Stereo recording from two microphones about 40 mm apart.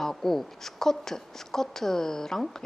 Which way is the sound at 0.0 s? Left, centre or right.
Centre.